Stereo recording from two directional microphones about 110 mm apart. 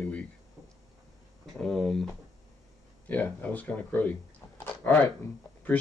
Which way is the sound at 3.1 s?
15° left (ahead or behind).